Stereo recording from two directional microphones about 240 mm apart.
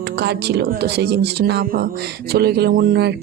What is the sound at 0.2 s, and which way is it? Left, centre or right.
A woman's voice, right.